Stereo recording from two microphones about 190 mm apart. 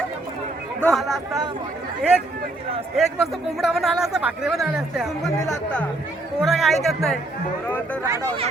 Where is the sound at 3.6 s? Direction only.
5° right (ahead or behind).